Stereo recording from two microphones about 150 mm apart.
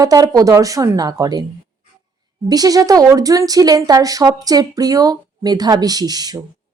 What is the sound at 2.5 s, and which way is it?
Speech, 25° right (ahead or behind).